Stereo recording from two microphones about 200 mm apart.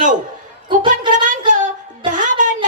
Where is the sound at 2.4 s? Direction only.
40° right (ahead or behind).